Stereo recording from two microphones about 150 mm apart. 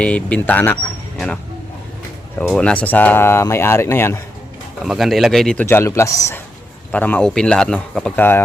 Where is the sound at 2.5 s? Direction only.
5° left (ahead or behind).